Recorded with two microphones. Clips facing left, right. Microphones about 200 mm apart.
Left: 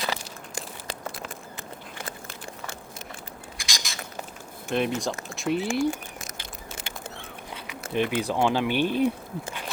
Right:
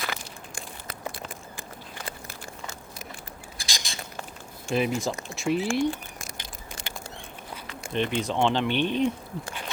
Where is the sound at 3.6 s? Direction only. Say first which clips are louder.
Even; 30° right (ahead or behind).